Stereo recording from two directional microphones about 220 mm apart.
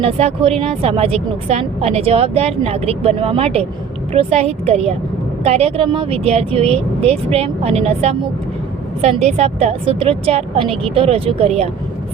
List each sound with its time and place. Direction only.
0.0 s a woman's voice: 30° right (ahead or behind)
9.2 s a woman's voice: 30° right (ahead or behind)